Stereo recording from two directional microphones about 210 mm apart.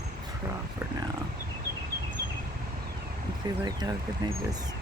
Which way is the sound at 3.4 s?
20° right (ahead or behind).